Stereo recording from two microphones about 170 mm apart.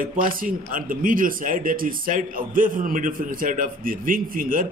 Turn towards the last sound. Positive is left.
turn(degrees=-55)  # may be behind; listen again after turning